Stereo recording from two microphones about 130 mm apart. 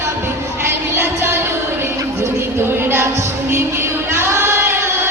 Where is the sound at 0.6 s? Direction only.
20° right (ahead or behind).